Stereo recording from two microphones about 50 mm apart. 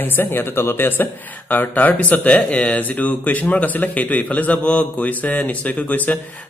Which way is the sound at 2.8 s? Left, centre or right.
Left.